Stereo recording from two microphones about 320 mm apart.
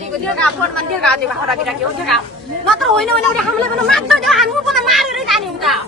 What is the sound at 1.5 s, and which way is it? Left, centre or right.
Speech, centre.